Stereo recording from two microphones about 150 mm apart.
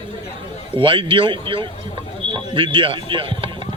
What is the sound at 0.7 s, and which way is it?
A man's voice, 35° right (ahead or behind).